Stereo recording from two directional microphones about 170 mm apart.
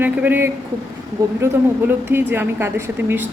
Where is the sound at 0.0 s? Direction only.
10° right (ahead or behind).